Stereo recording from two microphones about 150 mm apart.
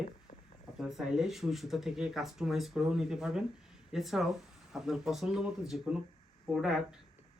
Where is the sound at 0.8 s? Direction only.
5° right (ahead or behind).